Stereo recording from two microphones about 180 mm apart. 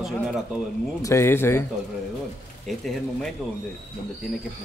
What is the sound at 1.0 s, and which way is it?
Speech, 15° left (ahead or behind).